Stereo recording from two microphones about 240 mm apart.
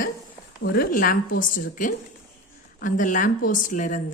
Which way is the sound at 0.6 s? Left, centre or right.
Left.